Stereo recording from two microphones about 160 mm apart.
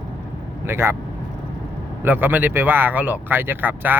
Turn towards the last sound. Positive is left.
turn(degrees=-10)  # may be behind; listen again after turning